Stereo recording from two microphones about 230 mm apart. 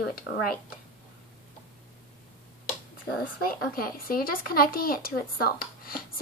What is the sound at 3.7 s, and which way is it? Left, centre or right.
Speech, left.